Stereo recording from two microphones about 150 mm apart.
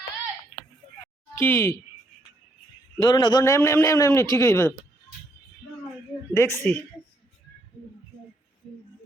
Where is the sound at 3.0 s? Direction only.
25° left (ahead or behind).